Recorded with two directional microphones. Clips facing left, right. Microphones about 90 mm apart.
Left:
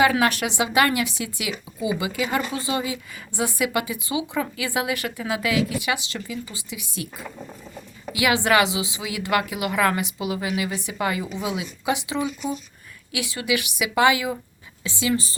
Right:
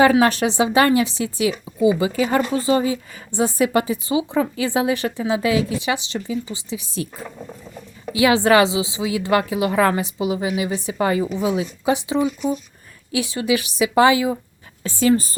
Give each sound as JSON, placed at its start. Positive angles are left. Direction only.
{"t": 0.0, "sound": "speech", "side_deg": -35}
{"t": 8.1, "sound": "speech", "side_deg": -30}
{"t": 14.8, "sound": "a woman's voice", "side_deg": -45}